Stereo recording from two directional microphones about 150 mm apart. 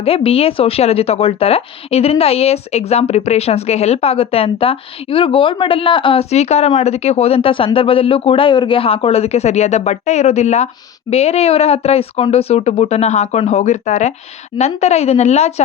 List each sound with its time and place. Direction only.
0.0 s speech: 40° left (ahead or behind)